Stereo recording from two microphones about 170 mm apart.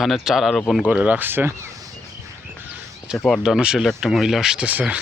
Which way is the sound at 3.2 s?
5° left (ahead or behind).